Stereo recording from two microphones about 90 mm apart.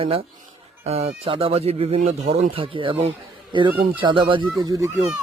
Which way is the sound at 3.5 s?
60° right (ahead or behind).